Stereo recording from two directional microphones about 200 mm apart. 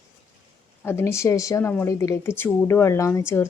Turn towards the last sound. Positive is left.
turn(degrees=15)  # may be behind; listen again after turning